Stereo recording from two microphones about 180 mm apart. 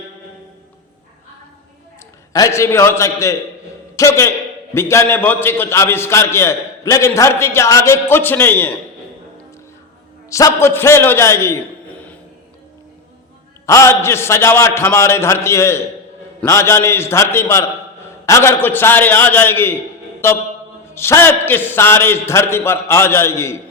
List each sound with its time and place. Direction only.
2.3 s a man's voice: 15° left (ahead or behind)
10.2 s a man's voice: 15° left (ahead or behind)
13.7 s a man's voice: 15° left (ahead or behind)
20.9 s a man's voice: 15° left (ahead or behind)